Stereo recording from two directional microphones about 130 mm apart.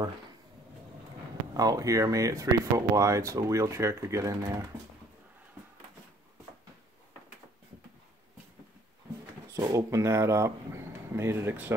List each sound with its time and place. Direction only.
1.5 s speech: 25° right (ahead or behind)
9.5 s speech: 25° right (ahead or behind)